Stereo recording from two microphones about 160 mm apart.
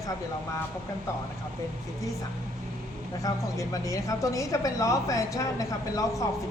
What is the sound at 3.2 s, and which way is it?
Speech, 20° left (ahead or behind).